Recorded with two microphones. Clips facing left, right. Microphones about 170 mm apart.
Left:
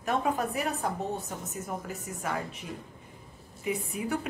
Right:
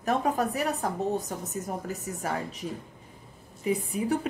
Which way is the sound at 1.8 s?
40° right (ahead or behind).